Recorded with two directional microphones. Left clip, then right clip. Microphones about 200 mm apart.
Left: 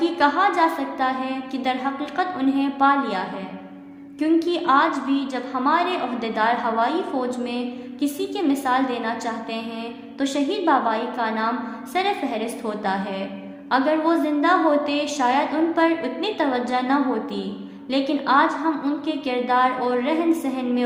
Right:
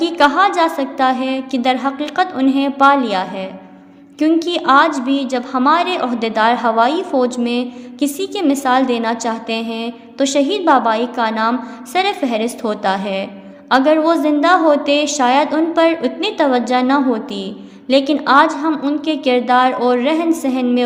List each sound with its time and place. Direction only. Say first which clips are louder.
0.0 s a woman's voice: right 6 dB; 40° right (ahead or behind)